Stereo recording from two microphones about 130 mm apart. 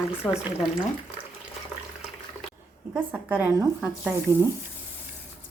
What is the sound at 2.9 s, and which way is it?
Speech, 10° right (ahead or behind).